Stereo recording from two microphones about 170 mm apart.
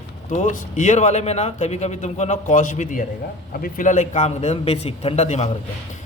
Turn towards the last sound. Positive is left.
turn(degrees=40)  # may be behind; listen again after turning